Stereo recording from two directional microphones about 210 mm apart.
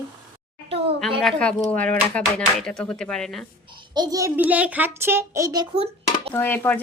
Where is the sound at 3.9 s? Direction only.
20° right (ahead or behind).